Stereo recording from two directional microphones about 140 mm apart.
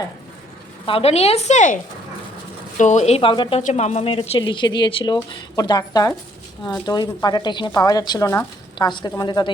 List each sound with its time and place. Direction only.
0.9 s speech: 45° left (ahead or behind)
3.6 s a woman's voice: 55° left (ahead or behind); by 9.5 s 30° left (ahead or behind)